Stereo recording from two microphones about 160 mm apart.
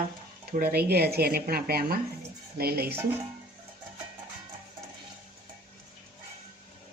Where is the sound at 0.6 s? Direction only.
80° right.